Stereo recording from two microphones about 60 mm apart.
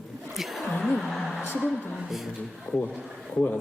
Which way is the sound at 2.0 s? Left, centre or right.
Centre.